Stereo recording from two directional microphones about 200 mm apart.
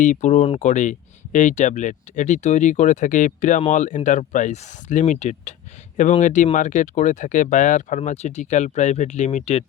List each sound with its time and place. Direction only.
0.0 s speech: 35° left (ahead or behind)